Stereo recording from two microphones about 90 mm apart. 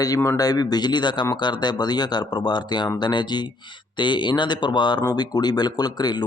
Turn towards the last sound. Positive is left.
turn(degrees=50)  # may be behind; listen again after turning